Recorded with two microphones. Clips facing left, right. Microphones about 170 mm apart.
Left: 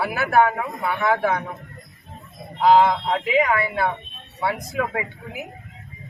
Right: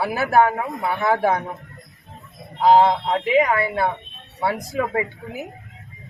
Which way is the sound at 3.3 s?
40° right (ahead or behind).